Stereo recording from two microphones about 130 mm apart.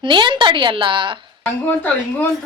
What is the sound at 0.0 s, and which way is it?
A woman's voice, 40° right (ahead or behind).